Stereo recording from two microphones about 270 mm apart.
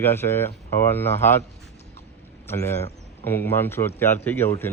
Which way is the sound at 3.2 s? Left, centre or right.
Centre.